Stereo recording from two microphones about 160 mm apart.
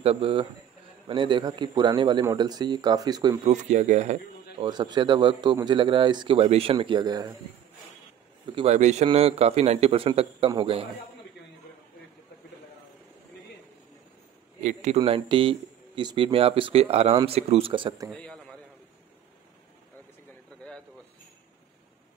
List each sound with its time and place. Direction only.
0.0 s a man's voice: 35° right (ahead or behind)
3.4 s speech: 45° right (ahead or behind)
4.6 s a man's voice: 25° right (ahead or behind)
8.6 s speech: 45° right (ahead or behind)
14.6 s speech: 45° right (ahead or behind)
15.0 s speech: 30° right (ahead or behind)
18.1 s a sound: 5° left (ahead or behind)